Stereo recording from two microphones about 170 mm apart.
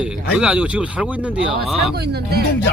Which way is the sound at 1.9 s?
70° right (ahead or behind).